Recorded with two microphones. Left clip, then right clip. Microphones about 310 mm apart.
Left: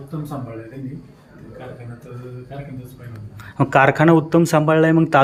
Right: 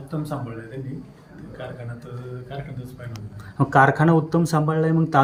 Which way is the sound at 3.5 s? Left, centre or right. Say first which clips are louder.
Left 2 dB; centre.